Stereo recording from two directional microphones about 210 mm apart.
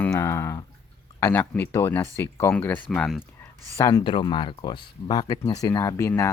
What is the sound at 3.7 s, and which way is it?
Speech, 15° left (ahead or behind).